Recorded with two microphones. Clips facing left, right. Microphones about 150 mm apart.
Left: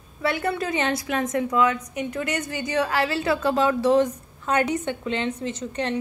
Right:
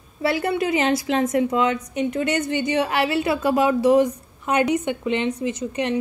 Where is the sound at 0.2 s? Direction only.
30° right (ahead or behind).